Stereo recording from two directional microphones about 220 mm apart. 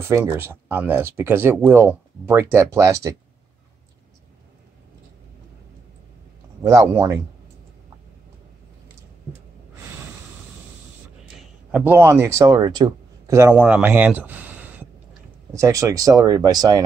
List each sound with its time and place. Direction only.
0.0 s speech: 10° right (ahead or behind)
6.6 s speech: 15° right (ahead or behind)
11.7 s speech: 10° right (ahead or behind)